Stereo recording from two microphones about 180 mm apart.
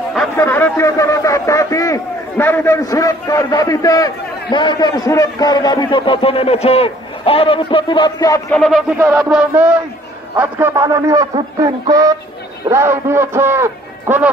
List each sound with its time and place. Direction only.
0.4 s a man's voice: 10° left (ahead or behind)
8.5 s speech: centre (ahead or behind)
8.9 s radio: 15° right (ahead or behind)
10.3 s a man's voice: 10° right (ahead or behind)